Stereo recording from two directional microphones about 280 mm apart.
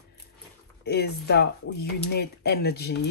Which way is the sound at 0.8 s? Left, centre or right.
Left.